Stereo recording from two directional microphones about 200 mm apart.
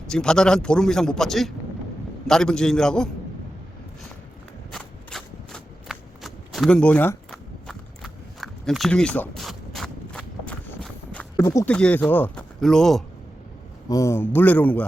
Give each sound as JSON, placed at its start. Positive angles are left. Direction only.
{"t": 0.1, "sound": "a man's voice", "side_deg": 5}
{"t": 4.7, "sound": "a sound", "side_deg": 0}
{"t": 13.8, "sound": "a man's voice", "side_deg": 15}